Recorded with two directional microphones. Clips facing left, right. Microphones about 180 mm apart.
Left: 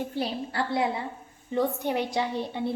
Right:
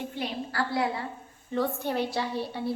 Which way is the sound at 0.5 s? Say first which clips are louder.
Left 1 dB; 20° left (ahead or behind).